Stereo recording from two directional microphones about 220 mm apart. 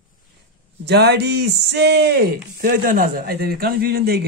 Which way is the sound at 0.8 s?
50° right (ahead or behind).